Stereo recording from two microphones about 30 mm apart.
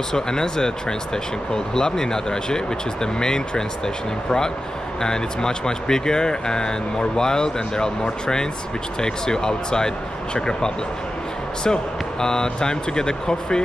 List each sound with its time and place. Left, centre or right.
0.1 s speech: left